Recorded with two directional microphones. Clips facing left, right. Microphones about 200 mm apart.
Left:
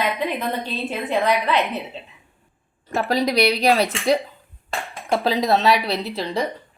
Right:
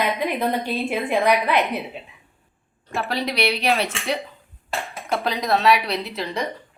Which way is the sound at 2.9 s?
40° left (ahead or behind).